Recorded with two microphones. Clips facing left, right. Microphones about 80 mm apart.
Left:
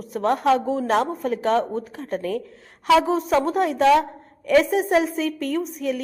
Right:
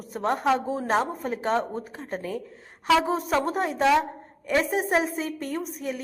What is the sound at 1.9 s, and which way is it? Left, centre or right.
Speech, right.